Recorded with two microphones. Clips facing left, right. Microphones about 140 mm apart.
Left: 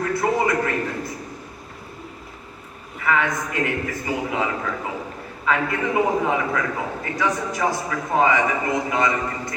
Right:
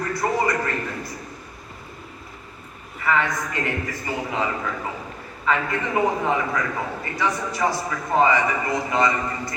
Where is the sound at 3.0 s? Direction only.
5° left (ahead or behind).